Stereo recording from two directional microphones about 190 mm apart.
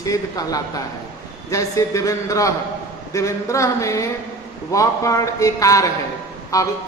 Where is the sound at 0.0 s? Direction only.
20° left (ahead or behind).